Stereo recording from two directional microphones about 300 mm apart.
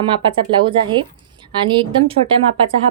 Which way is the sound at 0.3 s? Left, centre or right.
Centre.